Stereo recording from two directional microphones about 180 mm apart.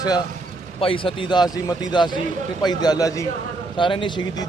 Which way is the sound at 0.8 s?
30° left (ahead or behind).